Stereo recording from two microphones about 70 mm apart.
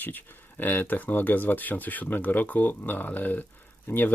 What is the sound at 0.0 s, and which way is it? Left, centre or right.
Speech, left.